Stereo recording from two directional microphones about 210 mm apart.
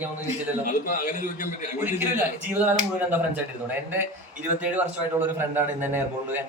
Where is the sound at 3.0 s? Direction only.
10° right (ahead or behind).